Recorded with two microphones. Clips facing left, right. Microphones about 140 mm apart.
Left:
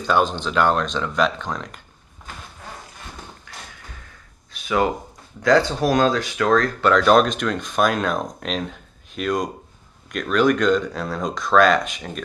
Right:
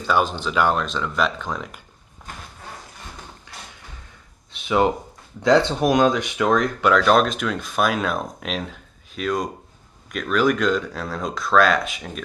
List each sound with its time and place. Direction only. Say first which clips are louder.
0.0 s speech: left 1 dB; 5° right (ahead or behind)
4.5 s a sound: right 2 dB; 25° right (ahead or behind)
5.4 s speech: even; 25° right (ahead or behind)
6.9 s speech: left 2 dB; centre (ahead or behind)